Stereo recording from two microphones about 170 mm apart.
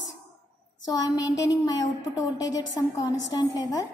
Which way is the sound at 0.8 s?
20° left (ahead or behind).